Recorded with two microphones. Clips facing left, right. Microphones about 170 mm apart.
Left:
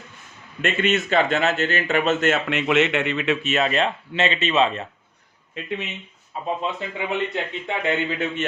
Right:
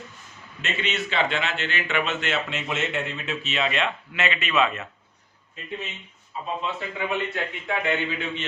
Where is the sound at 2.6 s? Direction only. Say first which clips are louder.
Left 8 dB; 70° left (ahead or behind).